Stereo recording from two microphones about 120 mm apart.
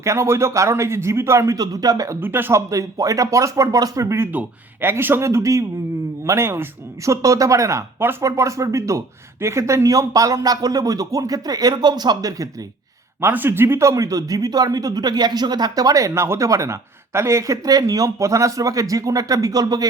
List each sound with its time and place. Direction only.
0.0 s speech: 25° right (ahead or behind)
2.2 s speech: 20° right (ahead or behind)
13.2 s speech: 20° right (ahead or behind)